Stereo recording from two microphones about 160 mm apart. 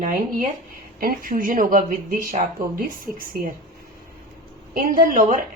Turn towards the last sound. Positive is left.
turn(degrees=-55)  # may be behind; listen again after turning